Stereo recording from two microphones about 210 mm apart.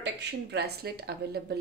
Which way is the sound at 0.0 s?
55° right (ahead or behind).